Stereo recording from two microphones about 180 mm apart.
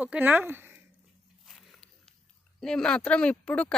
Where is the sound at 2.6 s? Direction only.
5° left (ahead or behind).